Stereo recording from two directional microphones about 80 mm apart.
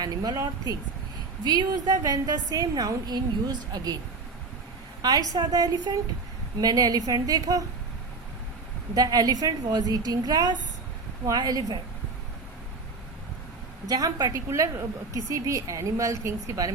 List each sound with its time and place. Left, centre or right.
0.0 s a woman's voice: right
1.5 s a woman's voice: right
5.3 s a woman's voice: right
9.0 s a woman's voice: right
13.8 s a woman's voice: right